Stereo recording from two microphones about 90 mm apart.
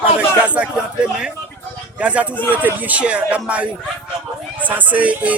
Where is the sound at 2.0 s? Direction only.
15° right (ahead or behind).